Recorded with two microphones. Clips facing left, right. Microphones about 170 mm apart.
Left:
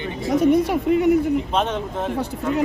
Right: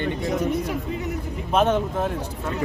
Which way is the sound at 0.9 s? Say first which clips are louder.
Left 12 dB; 70° left (ahead or behind).